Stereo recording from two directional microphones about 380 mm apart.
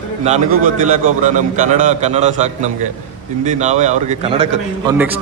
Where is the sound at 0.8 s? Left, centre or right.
Centre.